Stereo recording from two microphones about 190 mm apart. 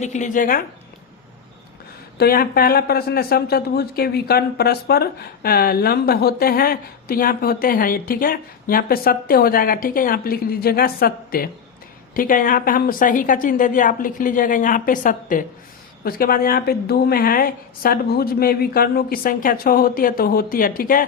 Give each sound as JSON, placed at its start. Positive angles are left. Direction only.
{"t": 0.0, "sound": "speech", "side_deg": 40}
{"t": 2.1, "sound": "speech", "side_deg": 55}